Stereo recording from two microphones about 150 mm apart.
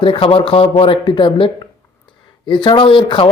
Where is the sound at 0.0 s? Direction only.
35° left (ahead or behind).